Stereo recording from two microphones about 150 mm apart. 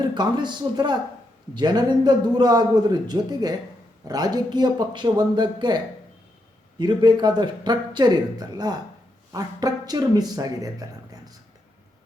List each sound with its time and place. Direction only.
0.1 s speech: 30° right (ahead or behind)